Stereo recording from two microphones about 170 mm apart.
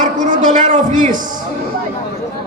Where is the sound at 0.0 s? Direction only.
50° right (ahead or behind).